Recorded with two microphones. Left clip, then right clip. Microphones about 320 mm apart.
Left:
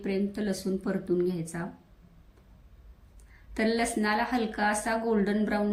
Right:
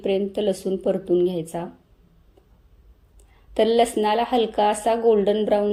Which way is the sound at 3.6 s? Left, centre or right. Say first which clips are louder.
Right 10 dB; centre.